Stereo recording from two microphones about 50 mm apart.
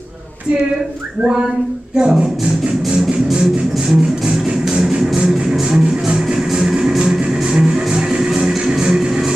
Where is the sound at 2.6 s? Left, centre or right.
Centre.